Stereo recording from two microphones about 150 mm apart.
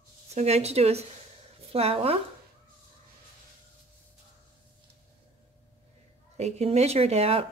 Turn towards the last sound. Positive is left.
turn(degrees=-40)  # may be behind; listen again after turning